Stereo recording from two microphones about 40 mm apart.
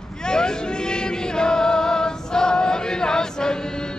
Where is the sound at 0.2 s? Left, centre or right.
Centre.